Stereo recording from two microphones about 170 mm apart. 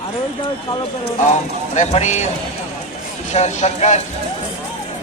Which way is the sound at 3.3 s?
40° left (ahead or behind).